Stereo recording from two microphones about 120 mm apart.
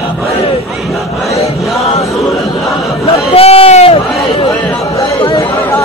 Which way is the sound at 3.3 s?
55° left (ahead or behind).